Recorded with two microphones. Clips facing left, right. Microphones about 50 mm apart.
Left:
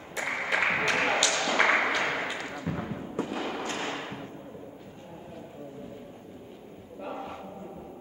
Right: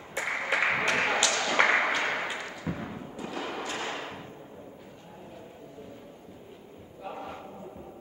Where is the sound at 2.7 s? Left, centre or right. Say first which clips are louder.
Left 1 dB; centre.